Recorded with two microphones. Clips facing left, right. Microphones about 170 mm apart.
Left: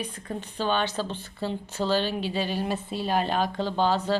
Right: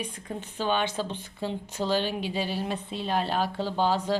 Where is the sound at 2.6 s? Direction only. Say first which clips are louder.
Left 2 dB; 5° left (ahead or behind).